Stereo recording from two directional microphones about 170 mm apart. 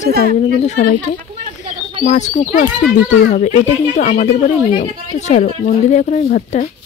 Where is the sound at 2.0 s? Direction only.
45° left (ahead or behind).